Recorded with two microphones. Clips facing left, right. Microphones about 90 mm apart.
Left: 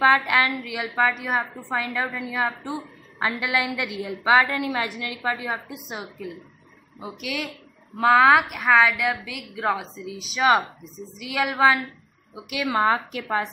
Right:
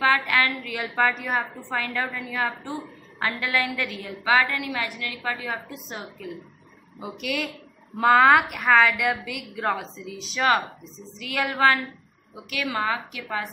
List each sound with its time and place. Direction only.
0.0 s a woman's voice: 20° left (ahead or behind)
0.7 s a woman's voice: 5° left (ahead or behind)
7.0 s a woman's voice: centre (ahead or behind)
12.6 s a woman's voice: 35° left (ahead or behind)